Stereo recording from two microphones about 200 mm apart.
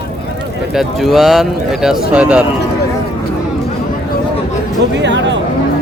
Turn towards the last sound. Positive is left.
turn(degrees=-60)  # may be behind; listen again after turning